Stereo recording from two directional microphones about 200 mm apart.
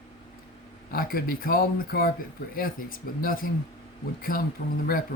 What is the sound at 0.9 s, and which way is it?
Speech, 45° left (ahead or behind).